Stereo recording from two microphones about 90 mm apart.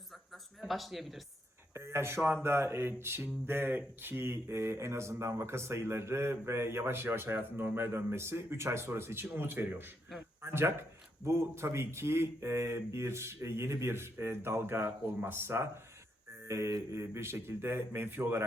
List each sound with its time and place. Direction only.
0.6 s speech: centre (ahead or behind)
1.7 s speech: 30° right (ahead or behind)